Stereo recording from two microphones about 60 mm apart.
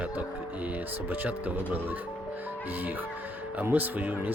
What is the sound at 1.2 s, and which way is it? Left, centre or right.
Speech, right.